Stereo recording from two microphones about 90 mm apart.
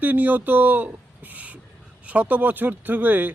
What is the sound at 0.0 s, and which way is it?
Speech, 20° right (ahead or behind).